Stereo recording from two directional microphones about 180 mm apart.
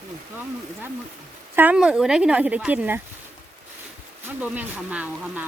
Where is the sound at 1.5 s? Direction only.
10° right (ahead or behind).